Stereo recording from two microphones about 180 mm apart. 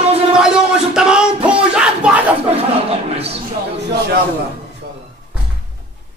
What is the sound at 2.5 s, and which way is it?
Chuckle, 35° right (ahead or behind).